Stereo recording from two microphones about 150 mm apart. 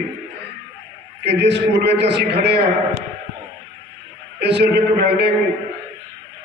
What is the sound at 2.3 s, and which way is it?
Speech, 90° right.